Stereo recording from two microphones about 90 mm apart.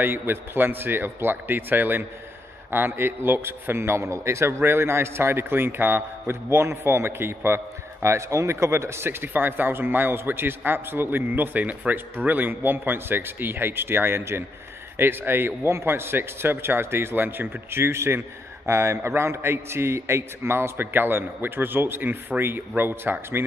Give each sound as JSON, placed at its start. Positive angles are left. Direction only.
{"t": 0.0, "sound": "a man's voice", "side_deg": -25}